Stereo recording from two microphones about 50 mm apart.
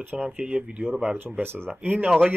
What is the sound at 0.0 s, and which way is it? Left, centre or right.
Speech, right.